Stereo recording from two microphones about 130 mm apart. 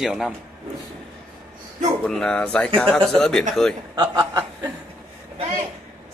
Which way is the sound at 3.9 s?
35° right (ahead or behind).